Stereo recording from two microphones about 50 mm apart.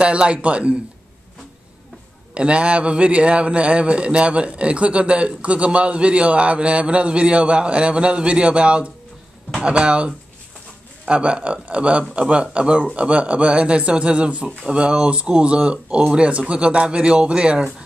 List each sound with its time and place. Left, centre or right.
0.0 s a man's voice: right
2.3 s a man's voice: right
16.0 s speech: centre
16.3 s a man's voice: right